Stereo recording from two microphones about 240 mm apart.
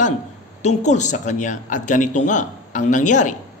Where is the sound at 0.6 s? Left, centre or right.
Left.